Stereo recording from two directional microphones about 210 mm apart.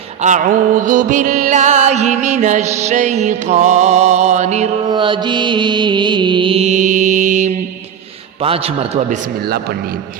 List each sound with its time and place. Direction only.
0.2 s music: 35° right (ahead or behind)
4.9 s mantra: 25° right (ahead or behind)
8.4 s a man's voice: 25° right (ahead or behind)